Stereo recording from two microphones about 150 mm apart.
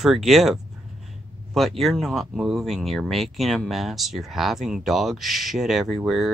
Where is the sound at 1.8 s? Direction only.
Centre (ahead or behind).